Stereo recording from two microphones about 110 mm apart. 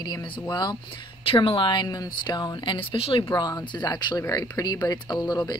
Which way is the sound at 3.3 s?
40° left (ahead or behind).